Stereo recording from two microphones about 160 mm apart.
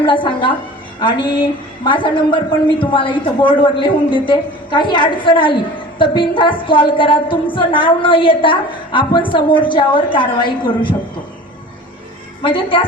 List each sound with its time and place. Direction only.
0.0 s a woman's voice: 30° left (ahead or behind)
1.8 s a woman's voice: 30° left (ahead or behind)
12.4 s a woman's voice: 35° left (ahead or behind)